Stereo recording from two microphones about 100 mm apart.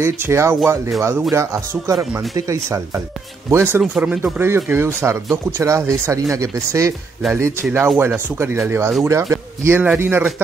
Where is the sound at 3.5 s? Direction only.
25° right (ahead or behind).